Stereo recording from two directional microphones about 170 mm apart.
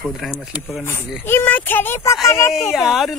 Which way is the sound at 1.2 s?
10° left (ahead or behind).